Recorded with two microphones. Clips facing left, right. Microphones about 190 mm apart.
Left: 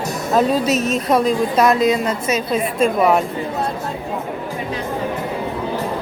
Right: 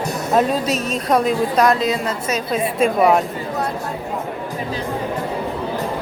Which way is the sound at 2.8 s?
Centre (ahead or behind).